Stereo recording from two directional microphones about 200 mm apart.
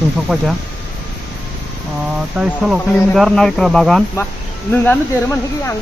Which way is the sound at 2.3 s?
5° right (ahead or behind).